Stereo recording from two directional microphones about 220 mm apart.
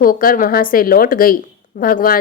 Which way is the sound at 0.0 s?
40° left (ahead or behind).